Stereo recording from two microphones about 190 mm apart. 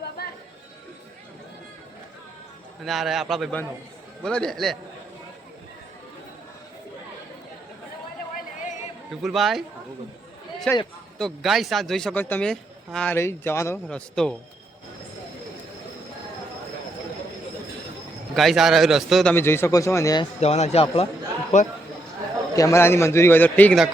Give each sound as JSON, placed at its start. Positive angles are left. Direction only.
{"t": 2.8, "sound": "speech", "side_deg": 0}
{"t": 9.2, "sound": "speech", "side_deg": 0}
{"t": 10.7, "sound": "a man's voice", "side_deg": 5}
{"t": 18.3, "sound": "a man's voice", "side_deg": 0}
{"t": 20.4, "sound": "a man's voice", "side_deg": 35}
{"t": 22.5, "sound": "a man's voice", "side_deg": 15}